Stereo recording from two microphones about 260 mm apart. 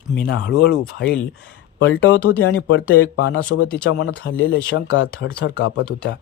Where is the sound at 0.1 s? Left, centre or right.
Left.